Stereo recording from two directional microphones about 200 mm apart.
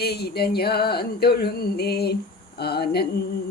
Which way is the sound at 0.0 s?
55° left (ahead or behind).